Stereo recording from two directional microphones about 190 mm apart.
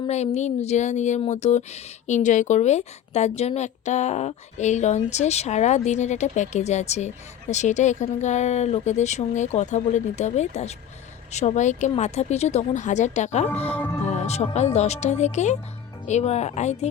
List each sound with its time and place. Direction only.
0.3 s speech: 35° left (ahead or behind)
13.7 s speech: 10° left (ahead or behind)
14.0 s speech: 35° left (ahead or behind)